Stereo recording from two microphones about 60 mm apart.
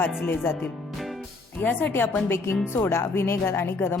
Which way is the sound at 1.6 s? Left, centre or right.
Left.